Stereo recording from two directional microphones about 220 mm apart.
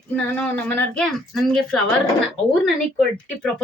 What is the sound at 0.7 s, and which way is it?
A woman's voice, 5° left (ahead or behind).